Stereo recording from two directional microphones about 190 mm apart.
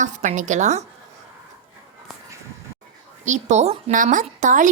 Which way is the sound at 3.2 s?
40° right (ahead or behind).